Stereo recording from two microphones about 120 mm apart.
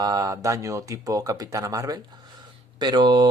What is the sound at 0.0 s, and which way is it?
Speech, 30° right (ahead or behind).